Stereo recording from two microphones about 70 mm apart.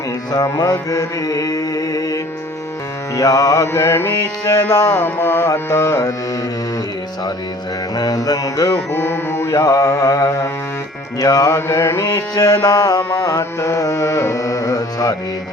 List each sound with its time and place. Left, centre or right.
0.6 s music: left
3.7 s music: left
4.4 s music: left
4.9 s music: left
5.6 s music: left
7.9 s music: left
8.9 s music: left
9.5 s music: left
12.0 s music: left